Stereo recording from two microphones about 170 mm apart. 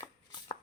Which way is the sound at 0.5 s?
40° left (ahead or behind).